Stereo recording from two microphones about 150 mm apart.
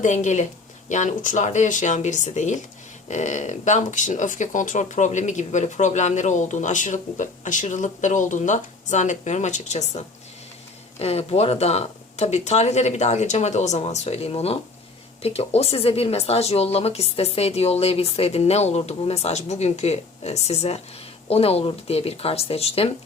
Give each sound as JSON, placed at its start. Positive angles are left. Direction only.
{"t": 0.0, "sound": "speech", "side_deg": 55}
{"t": 11.0, "sound": "speech", "side_deg": 40}